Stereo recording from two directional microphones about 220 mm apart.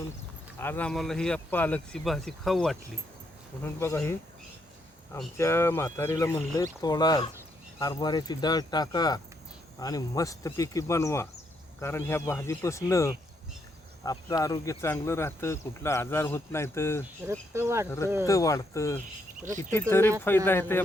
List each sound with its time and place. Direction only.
0.6 s speech: 10° left (ahead or behind)
3.6 s speech: 10° left (ahead or behind)
17.5 s speech: 10° right (ahead or behind)
18.3 s speech: 15° left (ahead or behind)